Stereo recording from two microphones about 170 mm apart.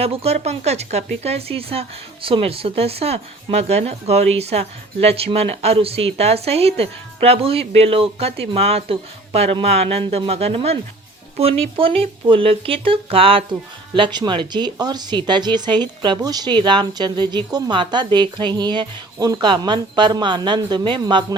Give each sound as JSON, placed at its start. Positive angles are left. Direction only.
{"t": 0.0, "sound": "speech", "side_deg": -35}